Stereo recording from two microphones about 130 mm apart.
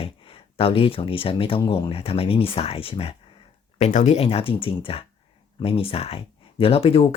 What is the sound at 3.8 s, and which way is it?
Speech, 60° left (ahead or behind).